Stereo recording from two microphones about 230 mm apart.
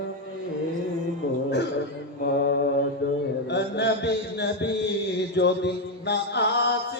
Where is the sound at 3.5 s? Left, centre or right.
Left.